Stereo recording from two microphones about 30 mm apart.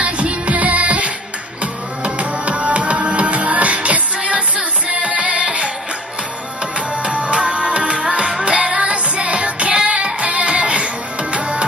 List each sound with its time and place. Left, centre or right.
0.0 s music: right
7.0 s music: right